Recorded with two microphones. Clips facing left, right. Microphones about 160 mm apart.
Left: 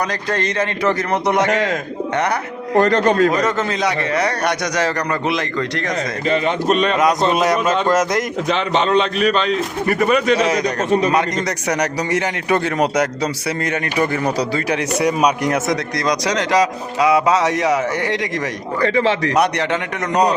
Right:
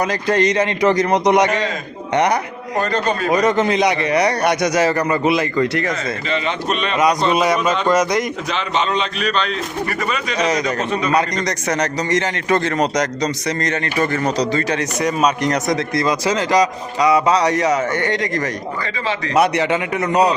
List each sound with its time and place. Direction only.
0.1 s a man's voice: 10° right (ahead or behind)
2.7 s a man's voice: 75° left (ahead or behind)
3.2 s a man's voice: 15° right (ahead or behind)
6.2 s a man's voice: 45° left (ahead or behind)
6.9 s a man's voice: centre (ahead or behind)
8.9 s a man's voice: 45° left (ahead or behind)
10.0 s speech: 55° left (ahead or behind)
10.3 s a man's voice: 5° left (ahead or behind)
18.8 s speech: 65° left (ahead or behind)
19.4 s a man's voice: 5° right (ahead or behind)